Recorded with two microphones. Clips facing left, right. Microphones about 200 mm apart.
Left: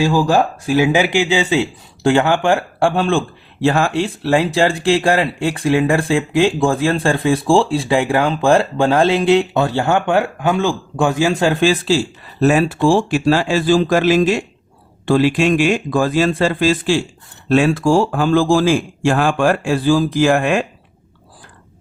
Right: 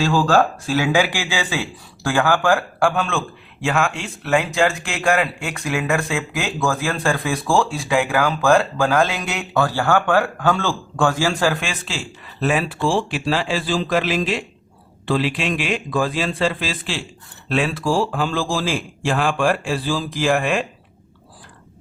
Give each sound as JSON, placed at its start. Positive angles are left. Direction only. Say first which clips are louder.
{"t": 0.0, "sound": "a man's voice", "louder": "left 2 dB", "side_deg": 15}